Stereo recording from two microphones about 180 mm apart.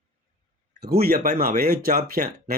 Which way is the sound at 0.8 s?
60° right (ahead or behind).